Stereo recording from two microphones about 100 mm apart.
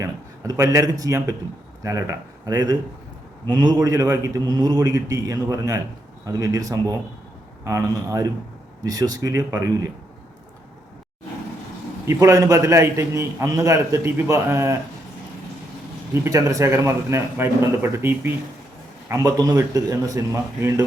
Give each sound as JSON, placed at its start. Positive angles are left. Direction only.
{"t": 0.0, "sound": "a man's voice", "side_deg": -30}
{"t": 12.0, "sound": "a man's voice", "side_deg": -30}
{"t": 16.2, "sound": "a man's voice", "side_deg": -30}